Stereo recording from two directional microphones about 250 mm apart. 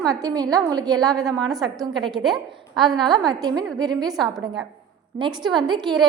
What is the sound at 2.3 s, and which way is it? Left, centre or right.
A woman's voice, centre.